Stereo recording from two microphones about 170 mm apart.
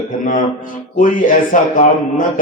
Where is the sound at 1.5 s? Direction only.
50° left (ahead or behind).